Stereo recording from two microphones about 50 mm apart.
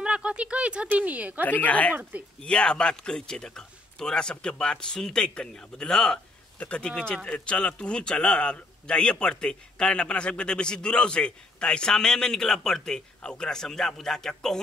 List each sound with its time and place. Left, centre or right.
0.0 s speech: right
1.4 s speech: left
2.4 s a man's voice: centre
6.6 s a man's voice: left